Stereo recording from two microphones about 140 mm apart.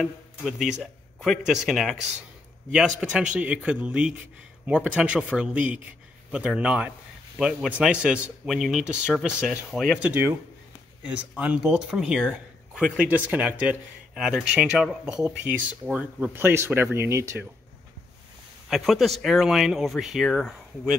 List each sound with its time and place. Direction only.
0.0 s speech: centre (ahead or behind)
11.1 s speech: 10° right (ahead or behind)
18.7 s speech: centre (ahead or behind)